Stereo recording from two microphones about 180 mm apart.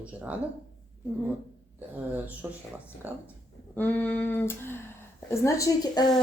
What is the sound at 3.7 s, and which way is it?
A woman's voice, 10° left (ahead or behind).